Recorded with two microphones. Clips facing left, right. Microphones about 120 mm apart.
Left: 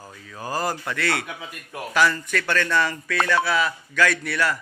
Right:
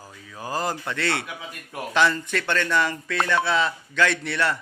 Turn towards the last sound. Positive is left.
turn(degrees=-25)  # may be behind; listen again after turning